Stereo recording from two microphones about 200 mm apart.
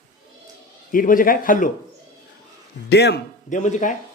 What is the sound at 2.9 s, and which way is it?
Speech, 55° left (ahead or behind).